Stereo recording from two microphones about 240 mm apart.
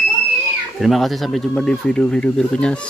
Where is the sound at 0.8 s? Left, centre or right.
Centre.